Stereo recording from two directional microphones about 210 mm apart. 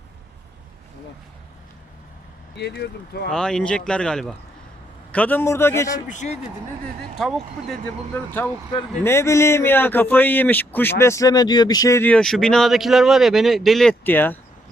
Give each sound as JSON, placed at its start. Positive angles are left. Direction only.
{"t": 2.6, "sound": "speech", "side_deg": 50}
{"t": 3.2, "sound": "a man's voice", "side_deg": 5}
{"t": 6.1, "sound": "a man's voice", "side_deg": 35}
{"t": 7.2, "sound": "a man's voice", "side_deg": 0}